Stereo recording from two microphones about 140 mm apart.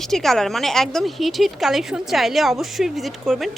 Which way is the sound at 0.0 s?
Centre (ahead or behind).